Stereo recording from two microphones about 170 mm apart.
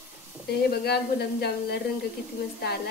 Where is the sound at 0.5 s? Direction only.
70° left (ahead or behind).